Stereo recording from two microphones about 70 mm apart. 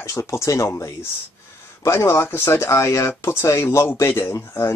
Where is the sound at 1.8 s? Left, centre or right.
Left.